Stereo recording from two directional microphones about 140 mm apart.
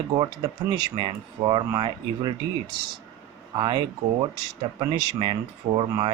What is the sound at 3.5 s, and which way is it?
Speech, 35° right (ahead or behind).